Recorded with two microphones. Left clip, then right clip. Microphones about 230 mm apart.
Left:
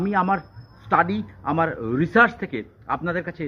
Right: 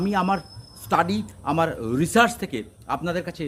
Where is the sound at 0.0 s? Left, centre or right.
Centre.